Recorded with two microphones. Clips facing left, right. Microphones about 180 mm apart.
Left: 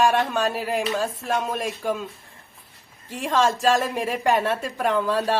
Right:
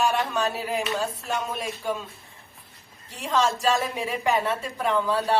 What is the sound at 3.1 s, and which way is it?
A woman's voice, 50° left (ahead or behind).